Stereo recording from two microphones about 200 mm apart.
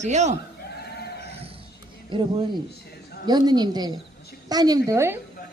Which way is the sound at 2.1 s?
25° right (ahead or behind).